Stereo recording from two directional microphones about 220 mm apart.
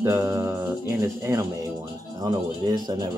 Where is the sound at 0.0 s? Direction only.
10° right (ahead or behind).